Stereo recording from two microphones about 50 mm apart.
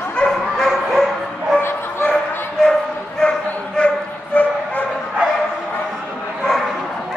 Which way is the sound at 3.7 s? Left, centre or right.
Left.